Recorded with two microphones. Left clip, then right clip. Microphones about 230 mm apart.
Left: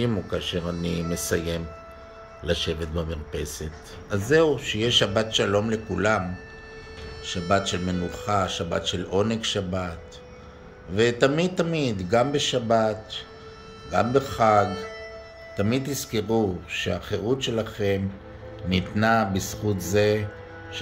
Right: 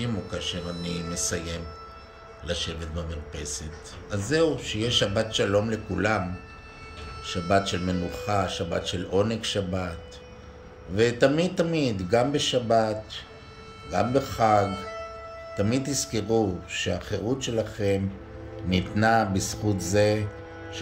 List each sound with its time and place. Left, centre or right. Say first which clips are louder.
0.0 s speech: left 4 dB; left; by 6.2 s centre
7.2 s speech: even; centre
11.0 s speech: left 1 dB; centre